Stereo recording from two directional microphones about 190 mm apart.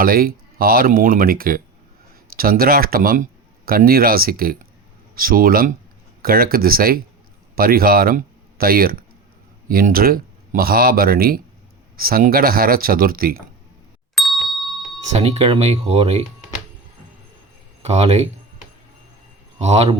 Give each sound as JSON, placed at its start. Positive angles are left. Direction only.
{"t": 0.0, "sound": "speech", "side_deg": -50}
{"t": 14.2, "sound": "ding", "side_deg": 0}
{"t": 15.1, "sound": "speech", "side_deg": -35}
{"t": 17.8, "sound": "speech", "side_deg": -35}
{"t": 19.5, "sound": "a man's voice", "side_deg": -35}